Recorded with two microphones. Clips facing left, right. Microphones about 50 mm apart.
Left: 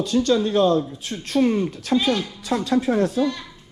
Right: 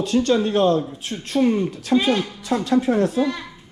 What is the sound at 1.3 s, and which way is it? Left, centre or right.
Speech, right.